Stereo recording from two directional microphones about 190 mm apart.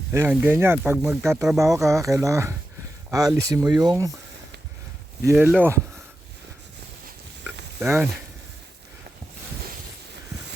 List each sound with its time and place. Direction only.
0.1 s speech: 10° right (ahead or behind)
5.2 s speech: 10° right (ahead or behind)
7.8 s sizzle: 15° right (ahead or behind)